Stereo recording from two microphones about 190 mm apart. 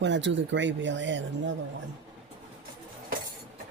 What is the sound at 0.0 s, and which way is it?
Speech, 70° right (ahead or behind).